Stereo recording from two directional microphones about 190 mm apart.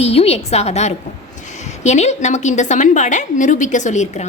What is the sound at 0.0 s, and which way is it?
A woman's voice, 35° left (ahead or behind).